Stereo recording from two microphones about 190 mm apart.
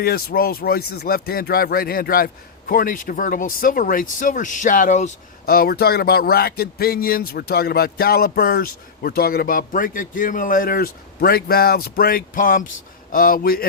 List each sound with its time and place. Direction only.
0.0 s speech: 55° left (ahead or behind)
5.5 s speech: 55° left (ahead or behind)